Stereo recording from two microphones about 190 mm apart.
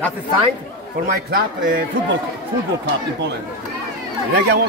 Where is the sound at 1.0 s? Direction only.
50° right (ahead or behind).